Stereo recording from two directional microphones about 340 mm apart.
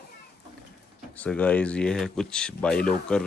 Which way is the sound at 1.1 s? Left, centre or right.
Centre.